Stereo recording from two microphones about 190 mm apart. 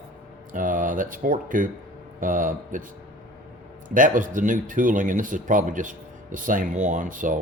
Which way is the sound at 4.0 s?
45° right (ahead or behind).